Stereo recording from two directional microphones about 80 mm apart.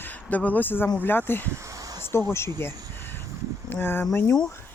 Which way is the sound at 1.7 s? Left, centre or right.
Right.